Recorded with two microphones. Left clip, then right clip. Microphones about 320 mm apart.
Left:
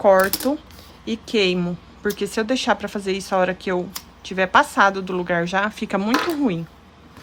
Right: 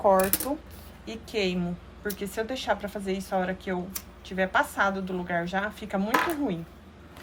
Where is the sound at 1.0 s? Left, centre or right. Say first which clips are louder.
Left 9 dB; centre.